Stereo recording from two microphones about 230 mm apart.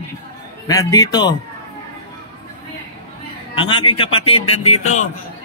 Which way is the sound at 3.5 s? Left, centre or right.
Left.